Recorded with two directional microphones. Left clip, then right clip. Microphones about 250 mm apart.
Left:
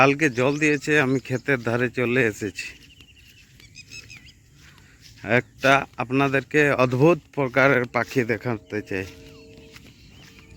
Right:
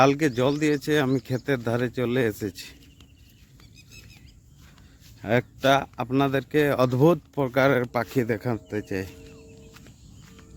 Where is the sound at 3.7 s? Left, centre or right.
Right.